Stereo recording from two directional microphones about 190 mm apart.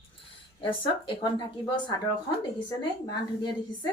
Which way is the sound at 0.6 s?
25° left (ahead or behind).